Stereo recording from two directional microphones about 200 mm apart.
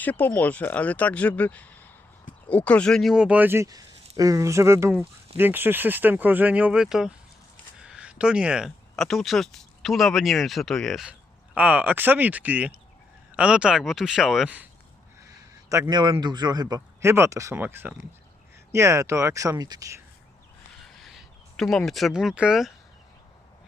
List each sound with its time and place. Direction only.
0.0 s a man's voice: 10° left (ahead or behind)
15.7 s speech: 20° right (ahead or behind)
20.8 s a sound: centre (ahead or behind)